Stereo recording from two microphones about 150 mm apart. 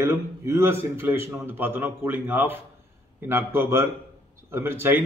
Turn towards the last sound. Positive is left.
turn(degrees=-15)  # may be behind; listen again after turning